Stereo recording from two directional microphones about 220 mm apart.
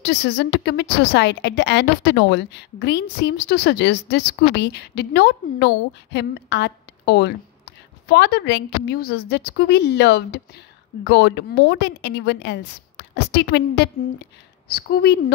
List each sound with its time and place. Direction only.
0.0 s a woman's voice: 50° left (ahead or behind)